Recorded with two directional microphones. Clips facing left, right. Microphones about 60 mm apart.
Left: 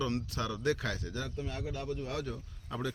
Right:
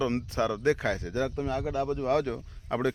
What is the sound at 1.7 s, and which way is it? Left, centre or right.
Speech, right.